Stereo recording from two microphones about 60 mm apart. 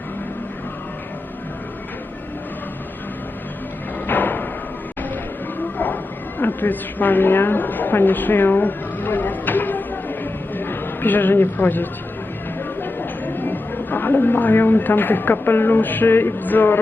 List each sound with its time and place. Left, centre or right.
4.0 s thump: left
5.7 s music: left
6.4 s a sound: left
12.8 s speech: left